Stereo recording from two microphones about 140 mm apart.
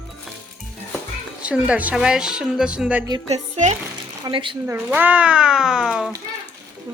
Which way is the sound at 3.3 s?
55° right (ahead or behind).